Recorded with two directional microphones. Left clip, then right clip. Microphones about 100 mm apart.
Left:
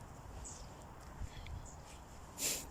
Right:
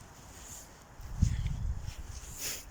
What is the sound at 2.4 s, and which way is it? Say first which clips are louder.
Dog: even; 45° left (ahead or behind).